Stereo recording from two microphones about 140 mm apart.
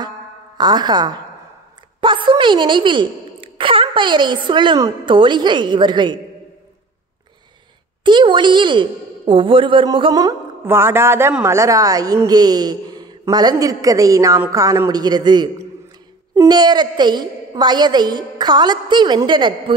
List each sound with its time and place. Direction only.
0.6 s a woman's voice: 30° right (ahead or behind)
2.0 s a sound: 35° right (ahead or behind)
5.0 s a woman's voice: 35° right (ahead or behind)
8.0 s a woman's voice: 35° right (ahead or behind)